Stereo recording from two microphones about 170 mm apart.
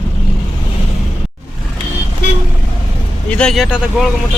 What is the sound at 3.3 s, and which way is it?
Speech, 5° left (ahead or behind).